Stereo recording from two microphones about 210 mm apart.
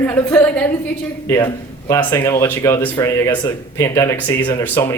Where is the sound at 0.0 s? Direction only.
10° left (ahead or behind).